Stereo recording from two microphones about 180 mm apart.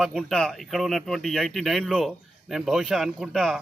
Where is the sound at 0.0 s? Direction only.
Centre (ahead or behind).